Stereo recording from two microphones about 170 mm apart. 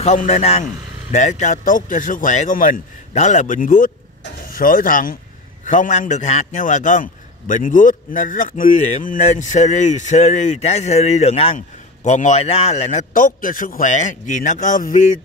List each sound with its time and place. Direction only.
0.0 s a man's voice: 40° left (ahead or behind)